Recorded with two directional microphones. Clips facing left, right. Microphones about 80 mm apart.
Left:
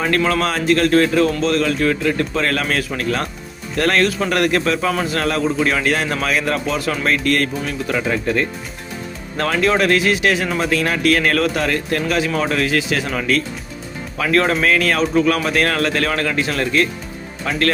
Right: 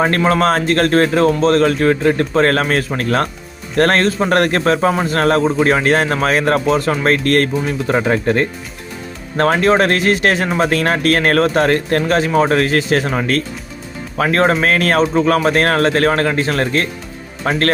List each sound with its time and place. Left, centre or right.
0.0 s speech: right